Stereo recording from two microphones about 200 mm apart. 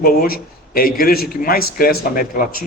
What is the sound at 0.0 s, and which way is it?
A man's voice, 45° left (ahead or behind).